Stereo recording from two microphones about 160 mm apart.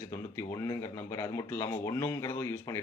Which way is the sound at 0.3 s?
20° left (ahead or behind).